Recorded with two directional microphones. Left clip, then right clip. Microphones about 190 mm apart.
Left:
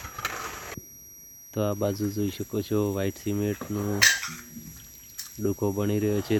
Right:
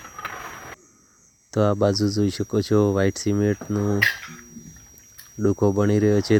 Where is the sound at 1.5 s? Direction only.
50° right (ahead or behind).